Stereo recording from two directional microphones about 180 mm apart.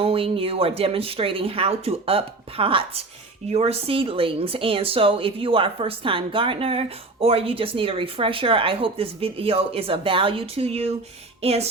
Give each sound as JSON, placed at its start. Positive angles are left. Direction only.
{"t": 0.0, "sound": "speech", "side_deg": -30}